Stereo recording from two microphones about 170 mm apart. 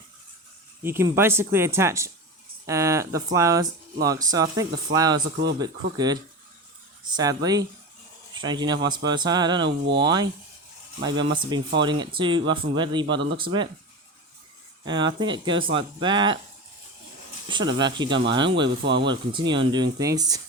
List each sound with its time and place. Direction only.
0.8 s speech: 15° right (ahead or behind)
9.6 s speech: 90° right
11.0 s speech: 25° right (ahead or behind)
14.8 s speech: 25° right (ahead or behind)
17.5 s speech: 25° right (ahead or behind)
18.8 s speech: 90° right
19.3 s speech: 30° right (ahead or behind)